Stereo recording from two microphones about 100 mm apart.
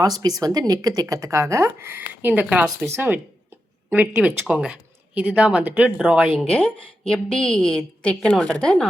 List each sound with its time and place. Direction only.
0.0 s speech: 40° right (ahead or behind); by 2.6 s 15° right (ahead or behind)
2.6 s speech: 25° right (ahead or behind)
6.5 s a woman's voice: 10° left (ahead or behind)